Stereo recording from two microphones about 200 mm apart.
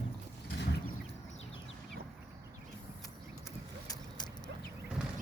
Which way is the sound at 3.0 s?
15° left (ahead or behind).